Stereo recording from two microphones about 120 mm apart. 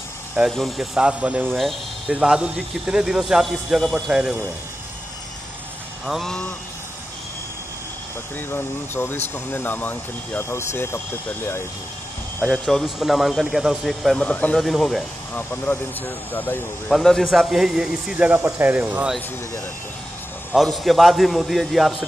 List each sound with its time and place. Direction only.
0.5 s speech: centre (ahead or behind)
1.6 s speech: centre (ahead or behind)
6.0 s speech: 5° left (ahead or behind)
8.4 s speech: 15° left (ahead or behind)
12.4 s speech: 5° left (ahead or behind)
15.3 s speech: 15° left (ahead or behind)
16.9 s speech: 5° left (ahead or behind); by 19.1 s 10° right (ahead or behind)
20.5 s speech: centre (ahead or behind)